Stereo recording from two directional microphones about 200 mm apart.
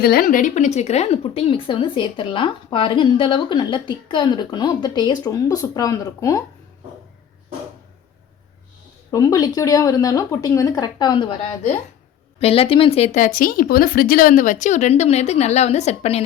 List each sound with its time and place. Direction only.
0.0 s a woman's voice: 50° left (ahead or behind); by 6.4 s 15° left (ahead or behind)
9.1 s speech: 15° left (ahead or behind)
12.4 s speech: 30° left (ahead or behind)